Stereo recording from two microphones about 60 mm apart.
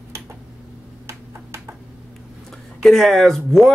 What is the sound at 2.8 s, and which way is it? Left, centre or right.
Speech, centre.